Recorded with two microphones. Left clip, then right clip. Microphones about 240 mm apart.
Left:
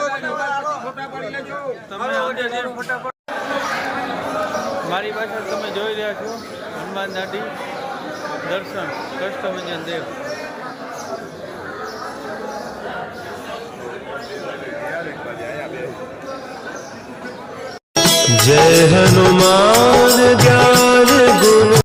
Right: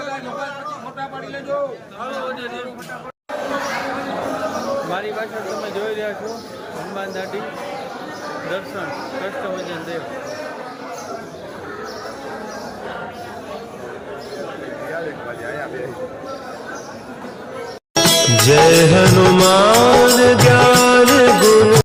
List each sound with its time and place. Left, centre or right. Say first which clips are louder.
4.9 s a man's voice: left 2 dB; centre
17.9 s music: even; centre